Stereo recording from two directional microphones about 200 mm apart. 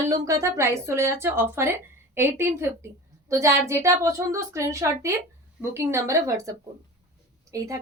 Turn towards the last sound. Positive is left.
turn(degrees=-15)  # may be behind; listen again after turning